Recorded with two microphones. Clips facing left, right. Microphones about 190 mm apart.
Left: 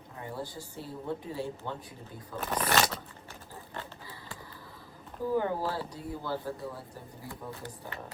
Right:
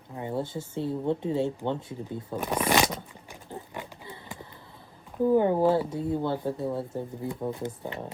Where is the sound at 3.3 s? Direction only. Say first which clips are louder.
Right 6 dB; 15° right (ahead or behind).